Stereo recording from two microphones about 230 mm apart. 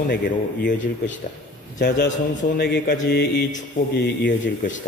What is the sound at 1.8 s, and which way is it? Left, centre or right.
A man's voice, left.